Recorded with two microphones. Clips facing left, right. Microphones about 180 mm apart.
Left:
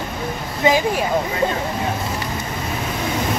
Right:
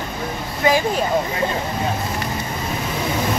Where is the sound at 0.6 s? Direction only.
20° left (ahead or behind).